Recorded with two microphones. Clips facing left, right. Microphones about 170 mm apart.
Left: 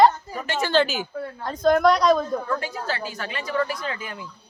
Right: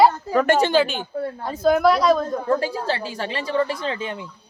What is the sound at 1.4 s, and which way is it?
Speech, 5° right (ahead or behind).